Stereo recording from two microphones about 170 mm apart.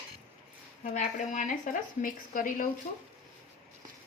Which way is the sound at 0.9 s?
45° left (ahead or behind).